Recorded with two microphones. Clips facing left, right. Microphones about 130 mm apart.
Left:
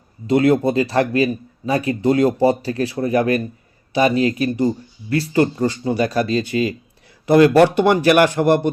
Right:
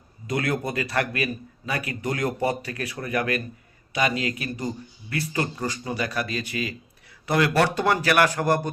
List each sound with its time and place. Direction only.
0.3 s speech: 30° left (ahead or behind)